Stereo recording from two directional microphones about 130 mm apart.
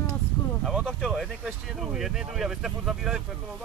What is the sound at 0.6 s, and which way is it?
Speech, centre (ahead or behind).